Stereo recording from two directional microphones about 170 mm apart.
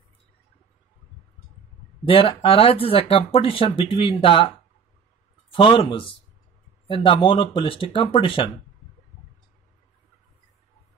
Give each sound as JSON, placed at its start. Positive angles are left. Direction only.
{"t": 2.0, "sound": "speech", "side_deg": 35}
{"t": 5.5, "sound": "speech", "side_deg": 30}